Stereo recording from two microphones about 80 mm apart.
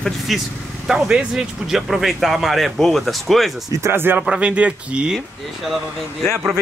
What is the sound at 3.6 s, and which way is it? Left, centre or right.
Speech, right.